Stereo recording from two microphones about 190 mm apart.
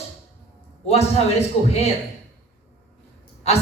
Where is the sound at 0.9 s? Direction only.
35° left (ahead or behind).